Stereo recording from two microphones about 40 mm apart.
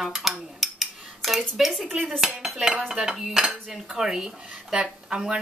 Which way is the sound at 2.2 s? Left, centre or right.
Centre.